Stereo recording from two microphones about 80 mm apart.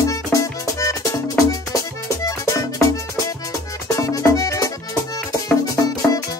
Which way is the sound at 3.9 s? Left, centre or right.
Left.